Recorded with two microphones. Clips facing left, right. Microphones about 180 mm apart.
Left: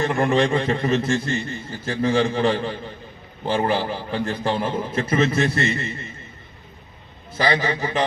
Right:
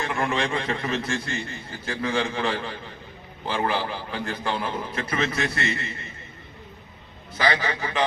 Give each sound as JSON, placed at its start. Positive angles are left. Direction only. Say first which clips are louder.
{"t": 0.0, "sound": "a man's voice", "louder": "left 7 dB", "side_deg": 40}
{"t": 7.3, "sound": "a man's voice", "louder": "left 3 dB", "side_deg": 35}